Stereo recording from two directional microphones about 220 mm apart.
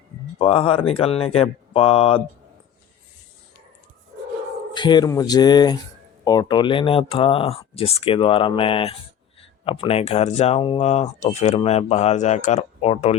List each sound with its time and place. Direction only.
0.3 s speech: 25° left (ahead or behind)
4.7 s speech: 20° left (ahead or behind)